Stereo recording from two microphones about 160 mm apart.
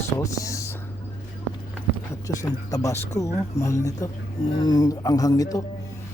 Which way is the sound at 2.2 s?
20° left (ahead or behind).